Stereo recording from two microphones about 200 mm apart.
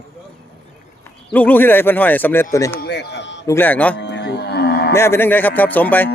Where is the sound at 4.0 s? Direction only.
60° left (ahead or behind).